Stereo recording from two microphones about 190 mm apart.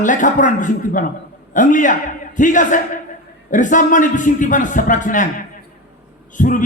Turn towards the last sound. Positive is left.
turn(degrees=45)  # may be behind; listen again after turning